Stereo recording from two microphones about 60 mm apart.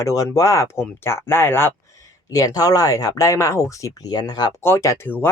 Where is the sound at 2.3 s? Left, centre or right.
Left.